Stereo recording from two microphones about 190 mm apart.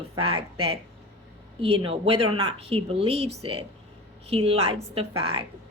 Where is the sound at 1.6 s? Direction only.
30° right (ahead or behind).